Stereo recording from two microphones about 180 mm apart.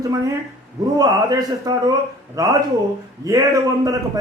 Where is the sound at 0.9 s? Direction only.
20° right (ahead or behind).